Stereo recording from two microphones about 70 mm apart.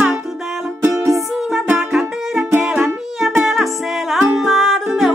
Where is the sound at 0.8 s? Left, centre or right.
Right.